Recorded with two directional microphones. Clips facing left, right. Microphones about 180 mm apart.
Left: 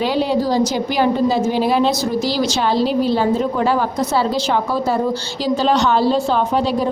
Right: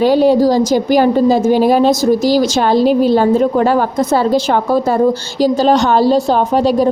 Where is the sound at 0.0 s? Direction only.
45° right (ahead or behind).